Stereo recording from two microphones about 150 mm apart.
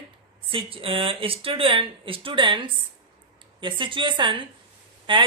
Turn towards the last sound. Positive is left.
turn(degrees=-35)  # may be behind; listen again after turning